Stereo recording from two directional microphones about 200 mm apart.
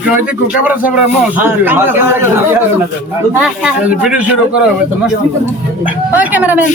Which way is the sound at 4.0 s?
5° right (ahead or behind).